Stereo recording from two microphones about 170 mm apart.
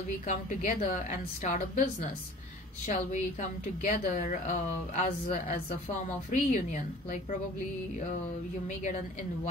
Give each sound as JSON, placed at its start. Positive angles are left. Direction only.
{"t": 0.3, "sound": "a woman's voice", "side_deg": 45}
{"t": 8.6, "sound": "a woman's voice", "side_deg": 45}